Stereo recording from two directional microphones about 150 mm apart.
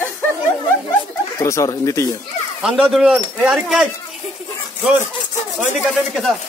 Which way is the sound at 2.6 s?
5° right (ahead or behind).